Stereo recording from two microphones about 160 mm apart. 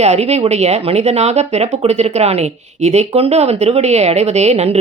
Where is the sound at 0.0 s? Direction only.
40° right (ahead or behind).